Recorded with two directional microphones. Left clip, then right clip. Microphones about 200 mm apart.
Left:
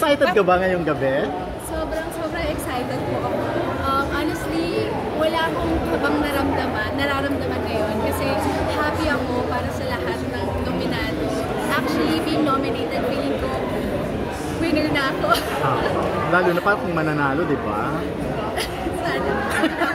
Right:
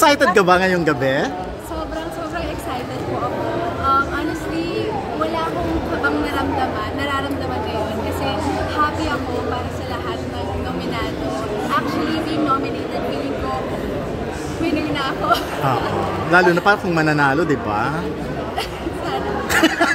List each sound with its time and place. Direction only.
0.0 s speech: 45° right (ahead or behind)
14.6 s a woman's voice: 10° left (ahead or behind)
16.3 s speech: 40° right (ahead or behind)
19.5 s a sound: 40° right (ahead or behind)